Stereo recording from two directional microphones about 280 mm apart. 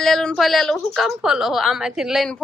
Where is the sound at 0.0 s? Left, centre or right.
Centre.